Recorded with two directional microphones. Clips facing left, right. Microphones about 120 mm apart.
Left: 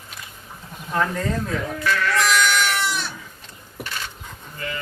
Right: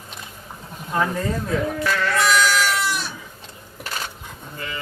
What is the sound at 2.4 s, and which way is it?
Goat, centre (ahead or behind).